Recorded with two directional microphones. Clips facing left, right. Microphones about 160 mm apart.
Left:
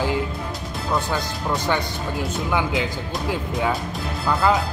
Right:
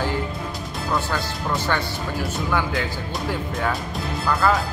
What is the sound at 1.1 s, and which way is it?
A man's voice, 15° left (ahead or behind).